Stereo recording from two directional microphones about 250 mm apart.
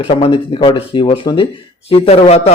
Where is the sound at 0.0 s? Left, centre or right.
Left.